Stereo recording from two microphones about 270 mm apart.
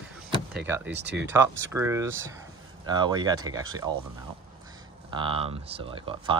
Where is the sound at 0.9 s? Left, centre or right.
Right.